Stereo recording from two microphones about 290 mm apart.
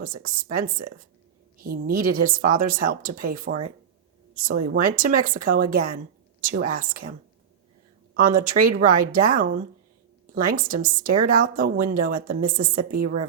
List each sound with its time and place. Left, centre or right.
0.0 s a woman's voice: right
8.1 s a woman's voice: right